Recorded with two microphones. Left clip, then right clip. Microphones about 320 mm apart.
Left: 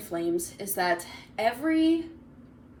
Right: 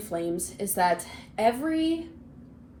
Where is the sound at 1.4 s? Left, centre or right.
Right.